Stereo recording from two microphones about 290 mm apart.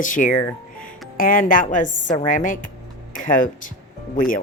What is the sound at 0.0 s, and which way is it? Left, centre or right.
A woman's voice, left.